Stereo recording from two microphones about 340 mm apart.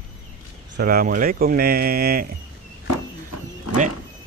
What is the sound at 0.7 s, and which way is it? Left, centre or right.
Speech, right.